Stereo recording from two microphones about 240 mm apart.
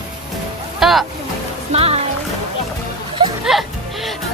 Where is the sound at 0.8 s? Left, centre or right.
Centre.